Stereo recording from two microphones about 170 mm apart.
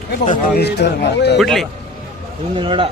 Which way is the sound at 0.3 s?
60° left (ahead or behind).